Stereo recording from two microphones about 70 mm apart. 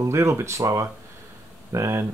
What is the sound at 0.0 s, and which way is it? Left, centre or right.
Speech, right.